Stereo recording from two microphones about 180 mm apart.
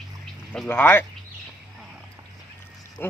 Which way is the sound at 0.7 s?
10° left (ahead or behind).